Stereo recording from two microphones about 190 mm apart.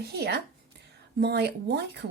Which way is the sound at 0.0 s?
55° right (ahead or behind).